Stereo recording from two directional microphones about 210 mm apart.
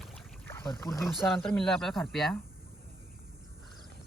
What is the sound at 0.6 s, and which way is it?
Speech, 15° left (ahead or behind).